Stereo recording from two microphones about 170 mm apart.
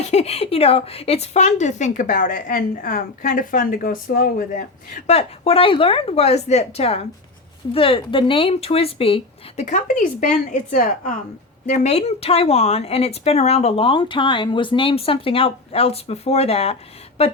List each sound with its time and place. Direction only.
0.0 s a woman's voice: 40° left (ahead or behind)
5.0 s speech: 35° left (ahead or behind)